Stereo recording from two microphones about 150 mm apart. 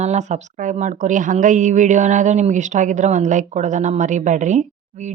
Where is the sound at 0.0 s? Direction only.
50° right (ahead or behind).